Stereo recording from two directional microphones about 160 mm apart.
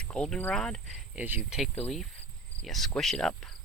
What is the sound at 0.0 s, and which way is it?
Cricket, 5° left (ahead or behind).